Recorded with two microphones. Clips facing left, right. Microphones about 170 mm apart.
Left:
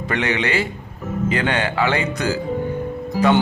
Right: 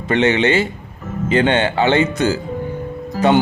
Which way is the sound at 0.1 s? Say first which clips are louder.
Right 7 dB; 25° right (ahead or behind).